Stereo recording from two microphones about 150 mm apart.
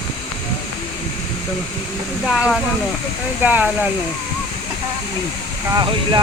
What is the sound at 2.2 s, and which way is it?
Speech, 5° right (ahead or behind).